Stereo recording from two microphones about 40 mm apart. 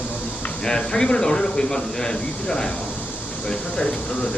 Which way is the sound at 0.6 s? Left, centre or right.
Centre.